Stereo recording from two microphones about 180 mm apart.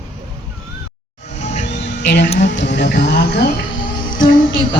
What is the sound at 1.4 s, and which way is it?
Music, 40° left (ahead or behind).